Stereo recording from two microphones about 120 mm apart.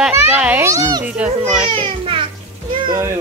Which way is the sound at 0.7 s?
30° right (ahead or behind).